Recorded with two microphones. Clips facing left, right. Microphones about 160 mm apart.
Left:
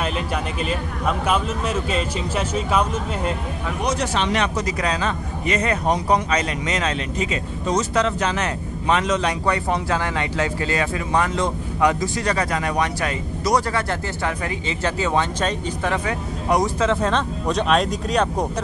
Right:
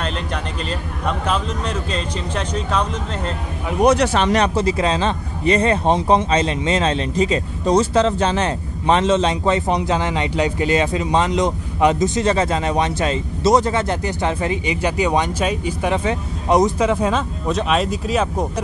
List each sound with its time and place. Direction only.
0.7 s speech: 5° left (ahead or behind)
3.8 s speech: 60° right (ahead or behind)
4.3 s speech: 35° right (ahead or behind); by 18.5 s centre (ahead or behind)